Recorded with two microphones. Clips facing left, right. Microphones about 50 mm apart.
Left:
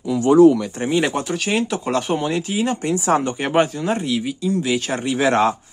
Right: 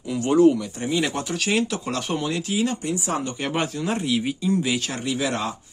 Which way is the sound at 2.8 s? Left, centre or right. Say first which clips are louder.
Left 7 dB; left.